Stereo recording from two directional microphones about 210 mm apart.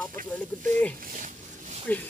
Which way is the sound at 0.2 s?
40° right (ahead or behind).